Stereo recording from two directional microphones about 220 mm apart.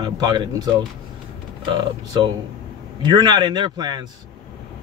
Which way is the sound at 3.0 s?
20° right (ahead or behind).